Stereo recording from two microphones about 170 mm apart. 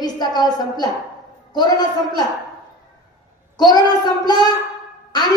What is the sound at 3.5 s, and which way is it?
A child's voice, 25° left (ahead or behind).